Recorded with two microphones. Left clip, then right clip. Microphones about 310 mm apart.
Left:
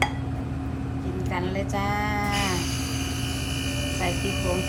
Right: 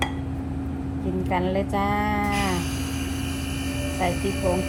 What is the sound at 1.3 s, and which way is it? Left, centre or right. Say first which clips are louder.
Speech: right 5 dB; centre.